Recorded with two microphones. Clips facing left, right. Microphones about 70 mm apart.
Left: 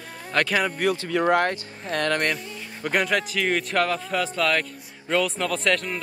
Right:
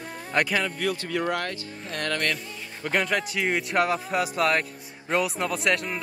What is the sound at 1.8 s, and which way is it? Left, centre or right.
Speech, left.